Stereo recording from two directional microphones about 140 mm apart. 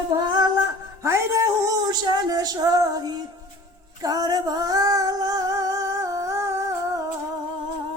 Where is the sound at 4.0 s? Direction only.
25° right (ahead or behind).